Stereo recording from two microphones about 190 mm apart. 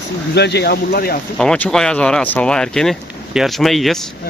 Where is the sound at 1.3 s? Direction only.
5° left (ahead or behind).